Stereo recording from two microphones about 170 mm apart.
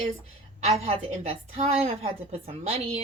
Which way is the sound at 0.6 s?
35° right (ahead or behind).